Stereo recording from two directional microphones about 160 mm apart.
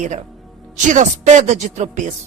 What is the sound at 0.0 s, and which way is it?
Speech, 50° right (ahead or behind).